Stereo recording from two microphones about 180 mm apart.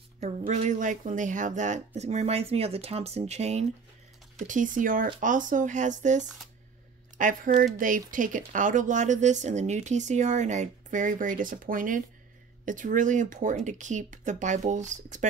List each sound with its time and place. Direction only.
0.2 s speech: 40° right (ahead or behind)
6.2 s speech: centre (ahead or behind)
7.2 s speech: 45° right (ahead or behind)